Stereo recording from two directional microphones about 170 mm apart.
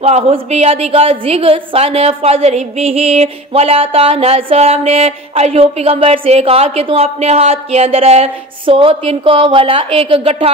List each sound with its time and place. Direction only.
0.0 s a woman's voice: 35° right (ahead or behind)